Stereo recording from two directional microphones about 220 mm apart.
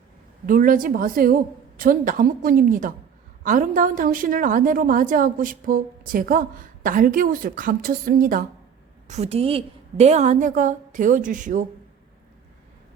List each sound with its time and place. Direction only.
0.4 s a woman's voice: 40° right (ahead or behind)